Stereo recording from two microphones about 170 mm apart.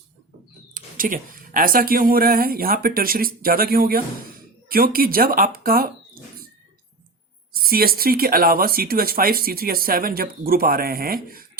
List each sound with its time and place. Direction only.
0.7 s speech: 55° right (ahead or behind)
7.5 s speech: 60° right (ahead or behind)